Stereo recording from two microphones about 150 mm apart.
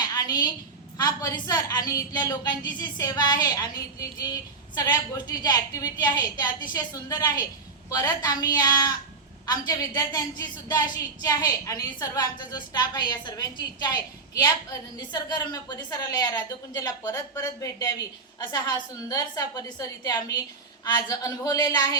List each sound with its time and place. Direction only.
0.3 s a woman's voice: 30° left (ahead or behind)